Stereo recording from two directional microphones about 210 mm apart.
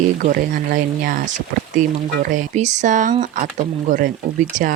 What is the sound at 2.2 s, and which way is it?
Speech, 35° right (ahead or behind).